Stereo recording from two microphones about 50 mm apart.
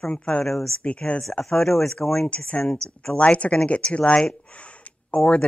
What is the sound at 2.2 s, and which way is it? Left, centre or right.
Speech, left.